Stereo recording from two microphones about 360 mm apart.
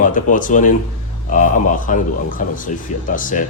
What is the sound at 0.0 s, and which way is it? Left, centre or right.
A man's voice, left.